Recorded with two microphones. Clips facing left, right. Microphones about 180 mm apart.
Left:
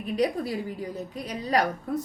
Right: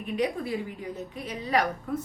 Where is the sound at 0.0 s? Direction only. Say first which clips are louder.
Left 2 dB; 35° left (ahead or behind).